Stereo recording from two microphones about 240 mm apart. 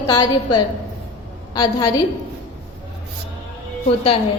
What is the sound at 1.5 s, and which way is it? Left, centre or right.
Speech, centre.